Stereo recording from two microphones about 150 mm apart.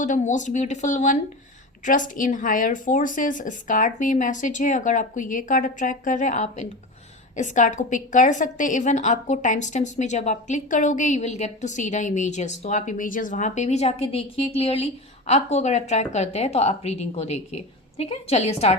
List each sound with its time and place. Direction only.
0.0 s a woman's voice: 55° left (ahead or behind)